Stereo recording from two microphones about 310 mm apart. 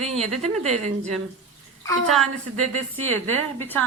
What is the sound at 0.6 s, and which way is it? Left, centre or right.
Speech, right.